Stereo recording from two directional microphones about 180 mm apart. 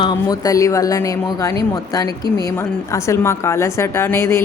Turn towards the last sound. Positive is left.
turn(degrees=15)  # may be behind; listen again after turning